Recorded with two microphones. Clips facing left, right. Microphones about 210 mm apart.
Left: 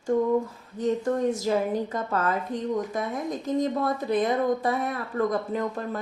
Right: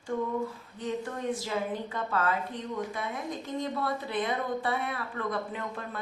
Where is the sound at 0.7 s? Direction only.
45° left (ahead or behind).